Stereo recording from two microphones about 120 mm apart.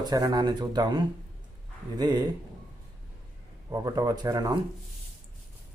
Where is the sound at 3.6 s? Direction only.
30° right (ahead or behind).